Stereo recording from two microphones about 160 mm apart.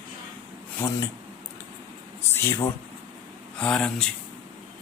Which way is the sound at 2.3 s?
15° left (ahead or behind).